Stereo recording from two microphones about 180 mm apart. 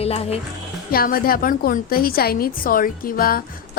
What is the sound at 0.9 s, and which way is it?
A woman's voice, 55° left (ahead or behind).